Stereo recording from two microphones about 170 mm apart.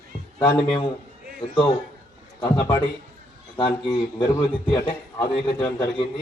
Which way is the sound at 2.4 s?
30° left (ahead or behind).